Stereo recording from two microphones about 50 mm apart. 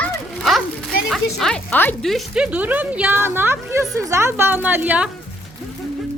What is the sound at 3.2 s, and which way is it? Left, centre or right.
Speech, right.